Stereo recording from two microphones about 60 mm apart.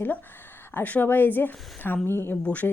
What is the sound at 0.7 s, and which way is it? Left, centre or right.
Speech, left.